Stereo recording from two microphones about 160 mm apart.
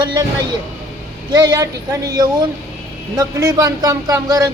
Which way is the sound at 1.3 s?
25° right (ahead or behind).